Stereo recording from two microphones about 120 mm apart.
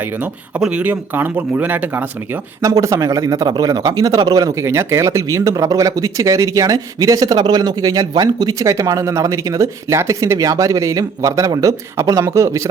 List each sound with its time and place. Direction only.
0.6 s speech: 10° right (ahead or behind)
2.6 s speech: 30° right (ahead or behind)